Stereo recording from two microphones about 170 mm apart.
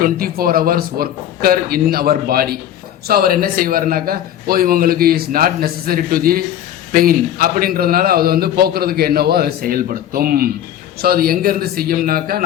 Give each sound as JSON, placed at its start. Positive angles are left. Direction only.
{"t": 0.0, "sound": "a man's voice", "side_deg": -60}